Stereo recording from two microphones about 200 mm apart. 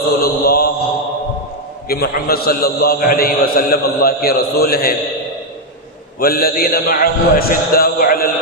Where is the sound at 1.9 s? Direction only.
50° left (ahead or behind).